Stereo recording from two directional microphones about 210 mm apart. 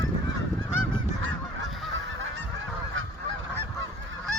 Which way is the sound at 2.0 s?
65° right (ahead or behind).